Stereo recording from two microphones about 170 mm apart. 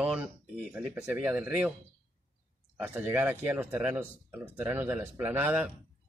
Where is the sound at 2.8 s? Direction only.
10° right (ahead or behind).